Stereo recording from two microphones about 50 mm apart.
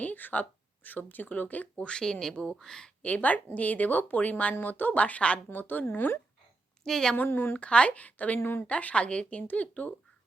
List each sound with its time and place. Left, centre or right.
0.0 s speech: left
1.9 s speech: centre
3.0 s speech: left
6.8 s speech: centre
7.3 s speech: left
7.6 s speech: left